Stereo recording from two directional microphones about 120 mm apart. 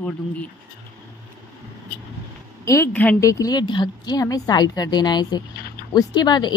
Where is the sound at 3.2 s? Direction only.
25° left (ahead or behind).